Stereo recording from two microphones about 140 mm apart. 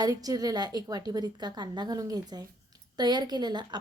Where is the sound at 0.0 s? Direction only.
25° right (ahead or behind).